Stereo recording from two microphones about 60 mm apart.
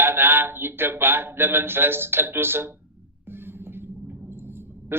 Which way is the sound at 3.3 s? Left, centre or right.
Right.